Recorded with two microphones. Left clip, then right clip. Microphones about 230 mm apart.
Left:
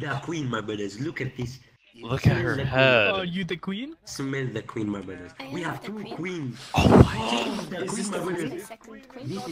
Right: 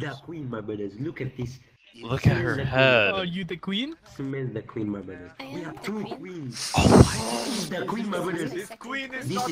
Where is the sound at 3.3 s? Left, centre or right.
Centre.